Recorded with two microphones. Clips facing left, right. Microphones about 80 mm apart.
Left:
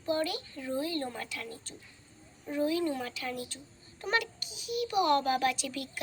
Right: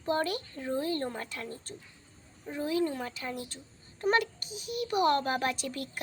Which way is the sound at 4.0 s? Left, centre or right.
Right.